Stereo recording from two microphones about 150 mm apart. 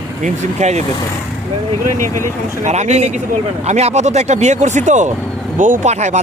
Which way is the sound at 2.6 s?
50° right (ahead or behind).